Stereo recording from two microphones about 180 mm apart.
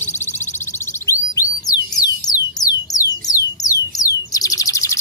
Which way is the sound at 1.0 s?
20° left (ahead or behind).